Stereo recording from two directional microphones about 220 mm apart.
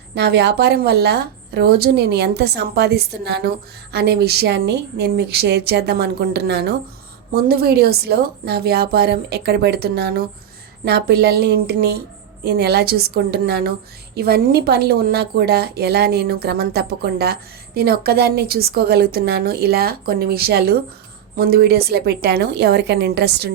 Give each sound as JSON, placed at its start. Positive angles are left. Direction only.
{"t": 0.1, "sound": "speech", "side_deg": -50}